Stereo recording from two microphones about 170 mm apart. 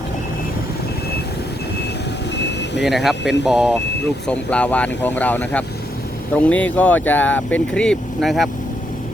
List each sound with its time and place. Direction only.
2.4 s vehicle: 90° left
2.8 s speech: centre (ahead or behind)
4.3 s speech: 5° left (ahead or behind)